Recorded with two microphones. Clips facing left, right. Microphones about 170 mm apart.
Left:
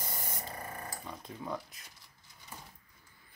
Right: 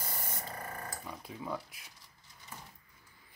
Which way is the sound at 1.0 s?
5° right (ahead or behind).